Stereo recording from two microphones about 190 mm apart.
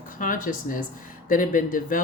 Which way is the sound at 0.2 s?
45° left (ahead or behind).